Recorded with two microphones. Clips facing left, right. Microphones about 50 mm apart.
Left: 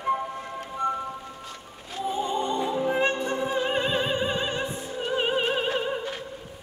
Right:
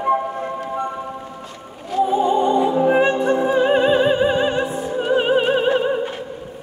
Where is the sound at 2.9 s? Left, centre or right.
Right.